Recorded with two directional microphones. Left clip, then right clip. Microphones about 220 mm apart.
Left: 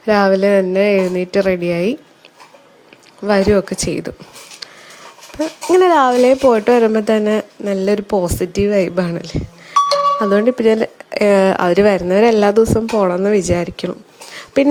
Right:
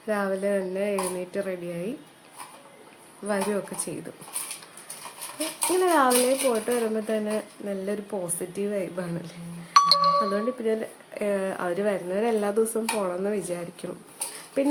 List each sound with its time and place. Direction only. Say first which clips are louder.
0.0 s speech: left 14 dB; 40° left (ahead or behind)
3.2 s speech: left 14 dB; 40° left (ahead or behind)
5.8 s speech: left 10 dB; 50° left (ahead or behind)